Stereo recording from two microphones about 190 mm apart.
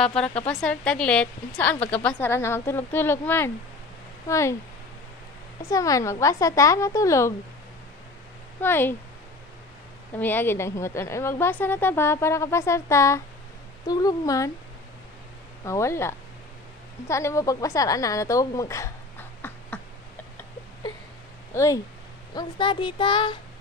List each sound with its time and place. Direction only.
0.0 s a woman's voice: 5° left (ahead or behind)
5.6 s a woman's voice: 15° left (ahead or behind)
8.5 s a woman's voice: 10° left (ahead or behind)
10.1 s a woman's voice: 10° left (ahead or behind)
15.6 s a woman's voice: 15° left (ahead or behind)
21.5 s a woman's voice: 15° left (ahead or behind)